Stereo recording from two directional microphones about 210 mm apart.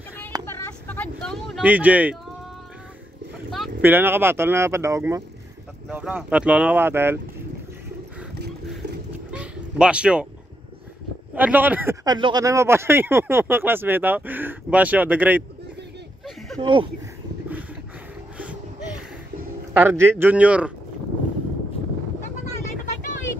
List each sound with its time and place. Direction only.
0.5 s speech: 10° left (ahead or behind); by 2.1 s 5° right (ahead or behind)
3.5 s speech: 5° right (ahead or behind)
9.3 s bow-wow: 5° right (ahead or behind)
11.3 s speech: 10° right (ahead or behind)
16.5 s speech: 25° right (ahead or behind)
19.7 s speech: 10° right (ahead or behind)